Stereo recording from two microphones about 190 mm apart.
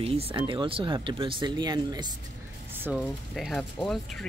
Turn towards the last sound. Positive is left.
turn(degrees=0)  # may be behind; listen again after turning